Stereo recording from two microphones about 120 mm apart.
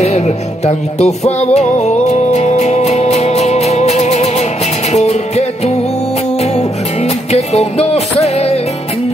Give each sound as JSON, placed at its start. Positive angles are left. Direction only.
{"t": 0.0, "sound": "music", "side_deg": 65}
{"t": 6.4, "sound": "music", "side_deg": 65}